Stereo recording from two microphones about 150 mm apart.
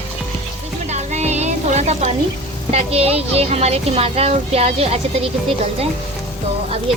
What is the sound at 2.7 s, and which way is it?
Speech, 40° right (ahead or behind).